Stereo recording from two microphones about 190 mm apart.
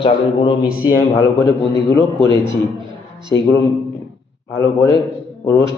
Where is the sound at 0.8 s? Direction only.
15° left (ahead or behind).